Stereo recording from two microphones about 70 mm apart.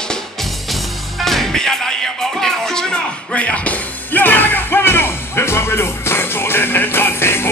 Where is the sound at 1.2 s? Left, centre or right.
Centre.